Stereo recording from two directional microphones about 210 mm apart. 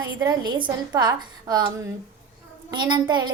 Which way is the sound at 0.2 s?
20° right (ahead or behind).